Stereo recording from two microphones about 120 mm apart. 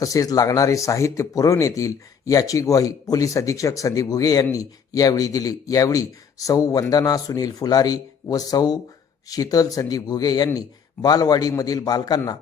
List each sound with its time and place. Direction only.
0.0 s a man's voice: 30° left (ahead or behind)